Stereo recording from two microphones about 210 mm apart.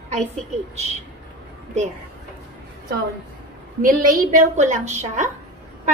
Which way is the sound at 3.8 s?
40° right (ahead or behind).